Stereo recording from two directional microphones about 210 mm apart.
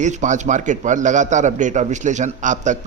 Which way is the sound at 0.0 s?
35° right (ahead or behind).